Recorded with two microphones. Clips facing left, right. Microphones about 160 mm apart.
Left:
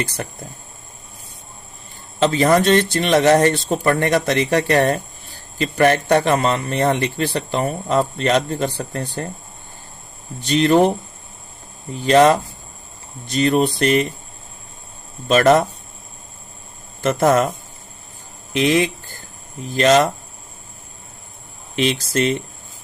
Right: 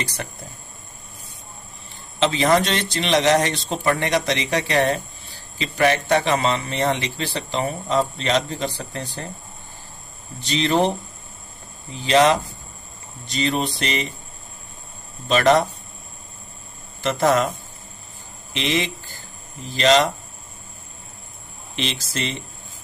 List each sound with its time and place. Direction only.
0.0 s a man's voice: 55° left (ahead or behind)
2.1 s a man's voice: 45° left (ahead or behind)
10.5 s a man's voice: 50° left (ahead or behind)
11.9 s a man's voice: 50° left (ahead or behind)
15.3 s a man's voice: 45° left (ahead or behind)
17.0 s a man's voice: 50° left (ahead or behind)
18.5 s a sound: 50° left (ahead or behind)
19.7 s a man's voice: 50° left (ahead or behind)
21.8 s a man's voice: 50° left (ahead or behind)